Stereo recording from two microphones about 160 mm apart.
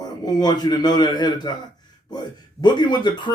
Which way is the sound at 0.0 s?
25° left (ahead or behind).